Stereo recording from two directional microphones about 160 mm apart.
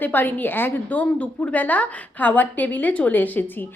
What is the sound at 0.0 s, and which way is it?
A woman's voice, 10° left (ahead or behind).